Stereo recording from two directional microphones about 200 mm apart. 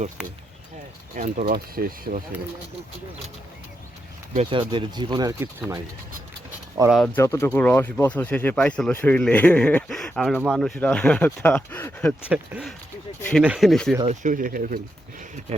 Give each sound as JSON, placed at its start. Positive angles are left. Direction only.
{"t": 0.2, "sound": "speech", "side_deg": -5}
{"t": 1.1, "sound": "speech", "side_deg": -40}
{"t": 4.4, "sound": "speech", "side_deg": -25}
{"t": 6.9, "sound": "speech", "side_deg": 5}
{"t": 12.3, "sound": "speech", "side_deg": -5}
{"t": 14.1, "sound": "speech", "side_deg": -40}